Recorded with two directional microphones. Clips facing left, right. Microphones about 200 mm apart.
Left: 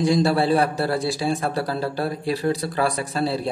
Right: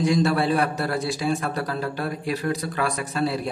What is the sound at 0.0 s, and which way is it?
A man's voice, 30° left (ahead or behind).